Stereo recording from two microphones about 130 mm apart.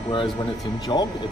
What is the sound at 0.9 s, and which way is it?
Speech, 35° left (ahead or behind).